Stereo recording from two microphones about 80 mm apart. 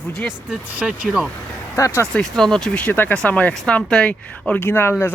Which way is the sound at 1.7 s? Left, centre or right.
Left.